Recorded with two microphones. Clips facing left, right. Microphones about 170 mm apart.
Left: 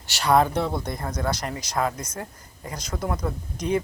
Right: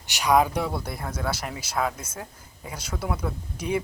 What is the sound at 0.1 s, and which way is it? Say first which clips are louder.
Speech: left 1 dB; 10° right (ahead or behind).